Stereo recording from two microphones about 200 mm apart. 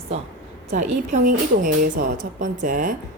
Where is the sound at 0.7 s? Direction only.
35° right (ahead or behind).